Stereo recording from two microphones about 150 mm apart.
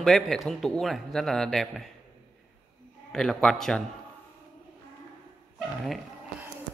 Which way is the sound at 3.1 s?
5° left (ahead or behind).